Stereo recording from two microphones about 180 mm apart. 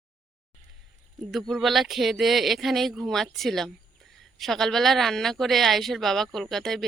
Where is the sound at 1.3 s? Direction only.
Centre (ahead or behind).